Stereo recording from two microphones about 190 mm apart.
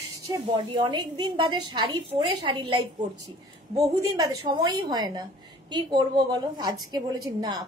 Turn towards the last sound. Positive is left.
turn(degrees=-20)  # may be behind; listen again after turning